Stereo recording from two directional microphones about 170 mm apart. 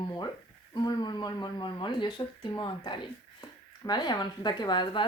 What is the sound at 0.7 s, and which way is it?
A woman's voice, 25° left (ahead or behind).